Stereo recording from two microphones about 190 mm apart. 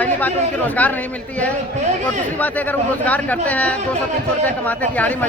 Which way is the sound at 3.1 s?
10° left (ahead or behind).